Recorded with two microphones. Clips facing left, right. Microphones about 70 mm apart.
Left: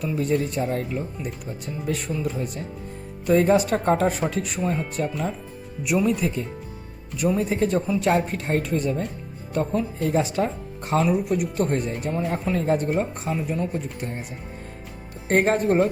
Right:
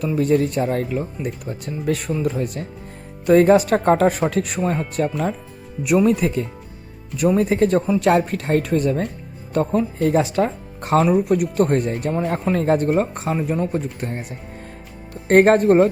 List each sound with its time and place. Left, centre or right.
0.0 s speech: right
1.5 s speech: right
6.1 s speech: right
8.1 s speech: right
9.6 s speech: right
11.0 s speech: right
13.3 s speech: right
15.3 s speech: right